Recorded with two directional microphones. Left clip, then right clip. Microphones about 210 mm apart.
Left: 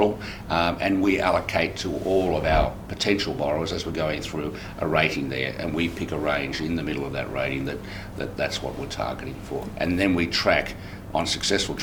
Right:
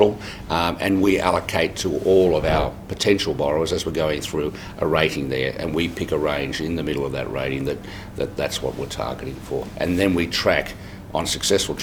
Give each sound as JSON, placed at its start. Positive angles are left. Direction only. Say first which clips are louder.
{"t": 0.5, "sound": "speech", "louder": "right 2 dB", "side_deg": -35}